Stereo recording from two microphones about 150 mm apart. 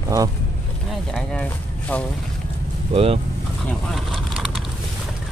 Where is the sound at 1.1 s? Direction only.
5° left (ahead or behind).